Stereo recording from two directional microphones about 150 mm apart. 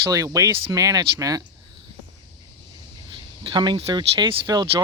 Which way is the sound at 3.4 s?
30° right (ahead or behind).